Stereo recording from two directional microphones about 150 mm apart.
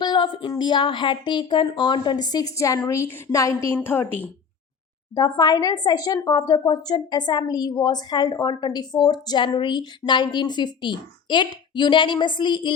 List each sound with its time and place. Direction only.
0.0 s a woman's voice: 30° left (ahead or behind); by 4.3 s 10° left (ahead or behind)
5.1 s a woman's voice: 25° left (ahead or behind)